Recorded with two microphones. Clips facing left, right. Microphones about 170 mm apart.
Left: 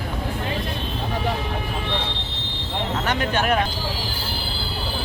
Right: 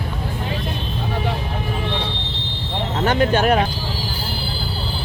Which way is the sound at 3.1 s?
35° right (ahead or behind).